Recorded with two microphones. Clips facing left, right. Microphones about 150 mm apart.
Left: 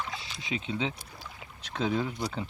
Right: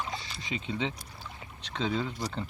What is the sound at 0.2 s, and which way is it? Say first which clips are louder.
Speech: left 2 dB; centre (ahead or behind).